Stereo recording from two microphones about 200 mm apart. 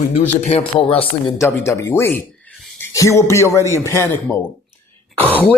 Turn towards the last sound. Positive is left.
turn(degrees=10)  # may be behind; listen again after turning